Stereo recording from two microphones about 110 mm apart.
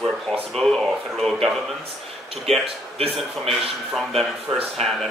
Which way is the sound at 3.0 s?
65° right (ahead or behind).